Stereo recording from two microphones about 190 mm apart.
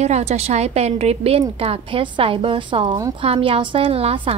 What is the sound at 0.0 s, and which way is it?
A woman's voice, 35° right (ahead or behind).